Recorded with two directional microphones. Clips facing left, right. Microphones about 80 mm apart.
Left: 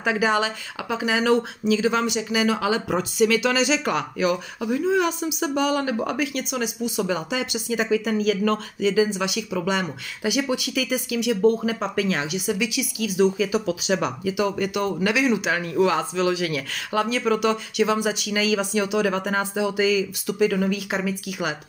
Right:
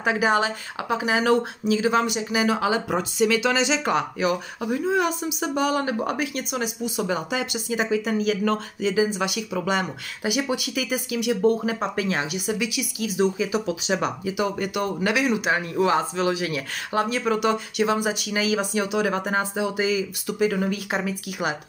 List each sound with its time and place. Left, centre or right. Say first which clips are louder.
0.0 s speech: even; right
7.9 s speech: left 2 dB; centre
8.8 s speech: left 2 dB; right
10.3 s speech: left 1 dB; centre; by 15.1 s right
15.1 s speech: even; right
15.5 s speech: even; right